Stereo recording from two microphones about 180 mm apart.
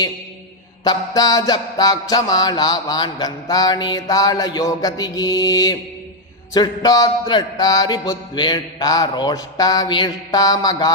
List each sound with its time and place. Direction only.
0.9 s music: 20° left (ahead or behind)